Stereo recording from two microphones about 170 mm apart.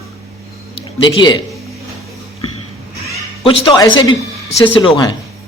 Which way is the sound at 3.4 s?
30° left (ahead or behind).